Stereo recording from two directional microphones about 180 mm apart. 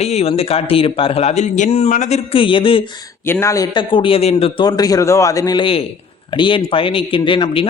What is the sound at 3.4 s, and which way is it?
A man's voice, 20° left (ahead or behind).